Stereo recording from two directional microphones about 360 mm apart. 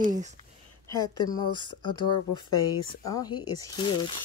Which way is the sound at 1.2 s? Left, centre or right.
Centre.